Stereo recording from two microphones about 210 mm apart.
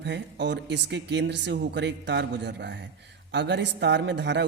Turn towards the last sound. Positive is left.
turn(degrees=-55)  # may be behind; listen again after turning